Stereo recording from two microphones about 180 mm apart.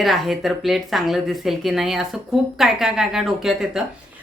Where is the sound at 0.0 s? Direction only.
Centre (ahead or behind).